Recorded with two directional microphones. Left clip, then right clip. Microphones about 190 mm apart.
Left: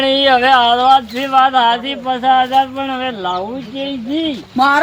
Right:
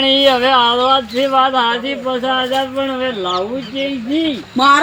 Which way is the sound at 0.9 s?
35° left (ahead or behind).